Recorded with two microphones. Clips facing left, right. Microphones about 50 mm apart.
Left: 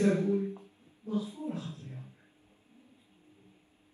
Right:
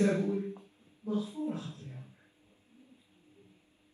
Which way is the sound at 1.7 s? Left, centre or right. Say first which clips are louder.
Left 2 dB; left.